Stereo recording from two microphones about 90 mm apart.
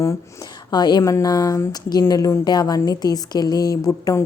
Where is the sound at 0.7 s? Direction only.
55° left (ahead or behind).